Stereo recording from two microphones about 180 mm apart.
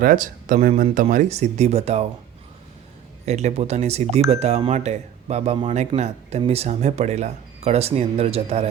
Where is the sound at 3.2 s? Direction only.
40° right (ahead or behind).